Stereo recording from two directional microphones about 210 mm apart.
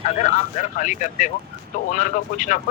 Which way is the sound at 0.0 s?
35° left (ahead or behind).